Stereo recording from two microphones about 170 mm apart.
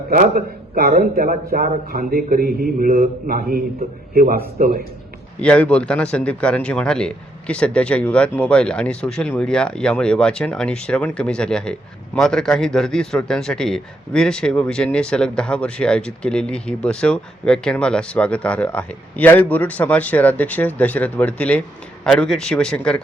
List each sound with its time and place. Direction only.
0.1 s speech: 55° right (ahead or behind)
5.4 s speech: 5° left (ahead or behind)